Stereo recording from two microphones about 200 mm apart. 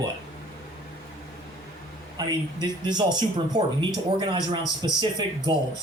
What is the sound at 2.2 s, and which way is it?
Speech, 20° right (ahead or behind).